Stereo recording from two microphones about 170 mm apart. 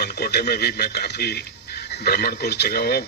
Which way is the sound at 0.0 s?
70° left (ahead or behind).